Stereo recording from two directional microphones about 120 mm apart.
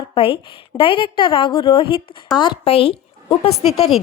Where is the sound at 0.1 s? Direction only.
50° left (ahead or behind).